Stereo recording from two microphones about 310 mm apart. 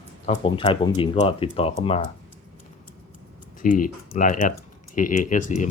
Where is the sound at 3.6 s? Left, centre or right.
Left.